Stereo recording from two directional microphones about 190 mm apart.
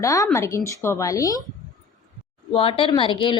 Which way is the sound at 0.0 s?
15° left (ahead or behind).